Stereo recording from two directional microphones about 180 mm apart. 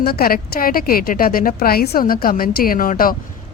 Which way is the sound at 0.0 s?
55° left (ahead or behind).